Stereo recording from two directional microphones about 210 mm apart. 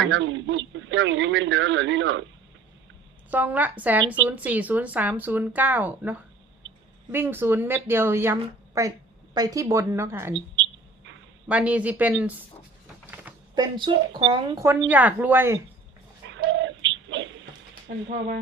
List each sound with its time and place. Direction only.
0.1 s speech: 60° right (ahead or behind)
3.2 s speech: 10° right (ahead or behind)
11.4 s speech: 5° right (ahead or behind)
13.6 s speech: 20° right (ahead or behind)
16.5 s bird: 60° right (ahead or behind)